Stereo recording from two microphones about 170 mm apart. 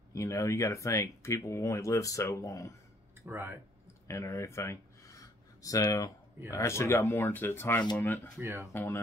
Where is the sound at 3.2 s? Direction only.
10° right (ahead or behind).